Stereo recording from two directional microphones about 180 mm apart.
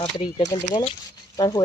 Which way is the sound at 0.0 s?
25° left (ahead or behind).